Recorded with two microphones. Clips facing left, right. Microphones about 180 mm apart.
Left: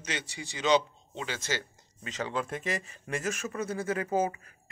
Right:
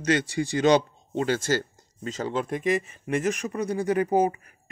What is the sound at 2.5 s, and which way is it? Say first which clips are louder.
Speech: right 9 dB; 20° right (ahead or behind).